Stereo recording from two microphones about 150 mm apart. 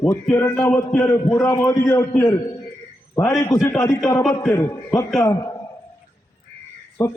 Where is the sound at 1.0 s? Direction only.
20° left (ahead or behind).